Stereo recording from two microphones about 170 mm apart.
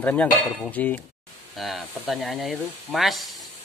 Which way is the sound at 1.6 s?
Centre (ahead or behind).